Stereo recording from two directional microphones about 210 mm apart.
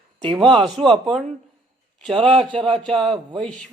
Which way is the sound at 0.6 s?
Centre (ahead or behind).